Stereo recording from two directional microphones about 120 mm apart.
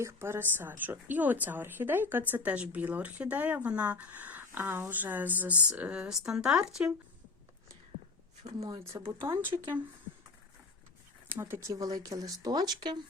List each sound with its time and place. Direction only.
0.0 s a woman's voice: 20° right (ahead or behind)
8.6 s a woman's voice: 25° right (ahead or behind)
11.3 s speech: 20° right (ahead or behind); by 13.0 s 35° right (ahead or behind)